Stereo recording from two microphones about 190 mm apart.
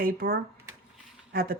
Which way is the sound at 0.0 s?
50° right (ahead or behind).